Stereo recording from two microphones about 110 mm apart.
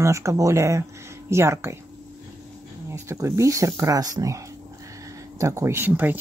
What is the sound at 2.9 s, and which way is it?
Speech, 25° right (ahead or behind).